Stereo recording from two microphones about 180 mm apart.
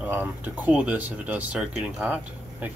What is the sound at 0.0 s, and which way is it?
Speech, 10° right (ahead or behind).